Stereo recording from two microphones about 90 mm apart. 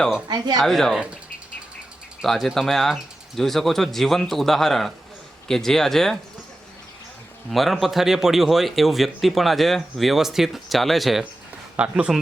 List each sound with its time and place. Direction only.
0.3 s speech: 50° right (ahead or behind)
0.6 s speech: 5° left (ahead or behind)
2.2 s speech: centre (ahead or behind)
7.5 s speech: centre (ahead or behind)